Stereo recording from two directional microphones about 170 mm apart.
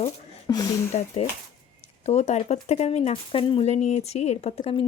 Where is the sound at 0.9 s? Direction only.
40° left (ahead or behind).